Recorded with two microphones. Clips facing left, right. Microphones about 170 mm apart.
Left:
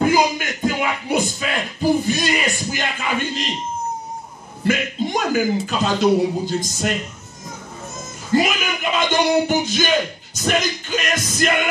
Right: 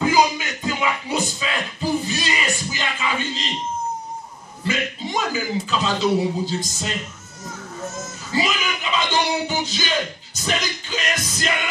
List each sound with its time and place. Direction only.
0.0 s a sound: 55° left (ahead or behind)
4.6 s a man's voice: 55° left (ahead or behind)
8.3 s speech: 55° left (ahead or behind)